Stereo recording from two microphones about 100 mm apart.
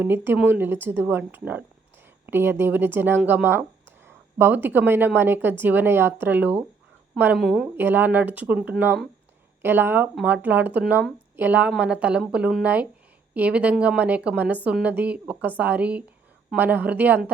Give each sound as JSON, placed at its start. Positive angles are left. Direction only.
{"t": 0.0, "sound": "a woman's voice", "side_deg": -20}
{"t": 7.3, "sound": "speech", "side_deg": -5}
{"t": 7.8, "sound": "a woman's voice", "side_deg": -20}